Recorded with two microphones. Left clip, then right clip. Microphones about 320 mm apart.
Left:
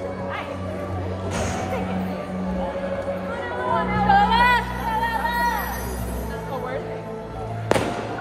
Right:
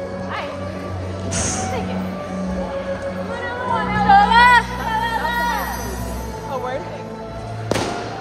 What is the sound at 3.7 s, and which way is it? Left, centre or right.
Music, right.